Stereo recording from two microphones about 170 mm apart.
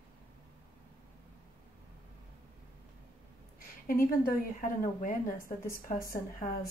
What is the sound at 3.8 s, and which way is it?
Speech, 60° left (ahead or behind).